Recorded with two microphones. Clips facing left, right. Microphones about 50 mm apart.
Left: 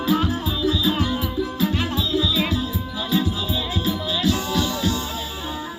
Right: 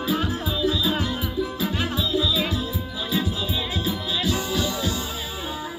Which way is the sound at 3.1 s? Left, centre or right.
Centre.